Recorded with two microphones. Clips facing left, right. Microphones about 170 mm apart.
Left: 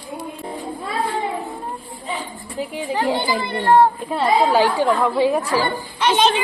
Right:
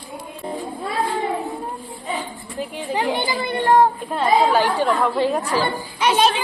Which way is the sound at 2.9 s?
20° right (ahead or behind).